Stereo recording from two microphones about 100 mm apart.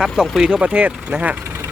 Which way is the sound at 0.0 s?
5° right (ahead or behind).